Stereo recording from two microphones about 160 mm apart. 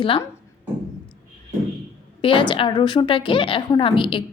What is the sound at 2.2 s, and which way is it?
A woman's voice, 35° left (ahead or behind).